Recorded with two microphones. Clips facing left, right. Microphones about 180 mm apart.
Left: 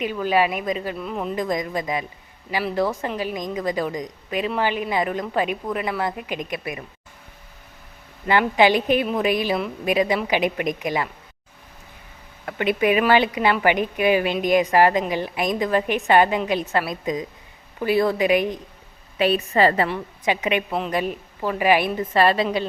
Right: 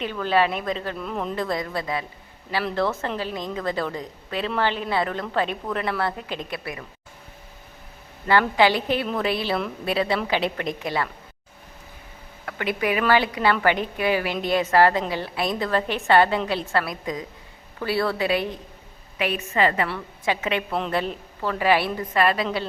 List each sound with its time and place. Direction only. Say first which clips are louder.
0.0 s a woman's voice: left 1 dB; 10° left (ahead or behind)
1.4 s a woman's voice: left 2 dB; 15° left (ahead or behind)
8.3 s a woman's voice: left 2 dB; 20° left (ahead or behind)
12.5 s a woman's voice: left 5 dB; 20° left (ahead or behind)
19.2 s a woman's voice: left 4 dB; 35° left (ahead or behind)
19.9 s a woman's voice: left 2 dB; 15° left (ahead or behind)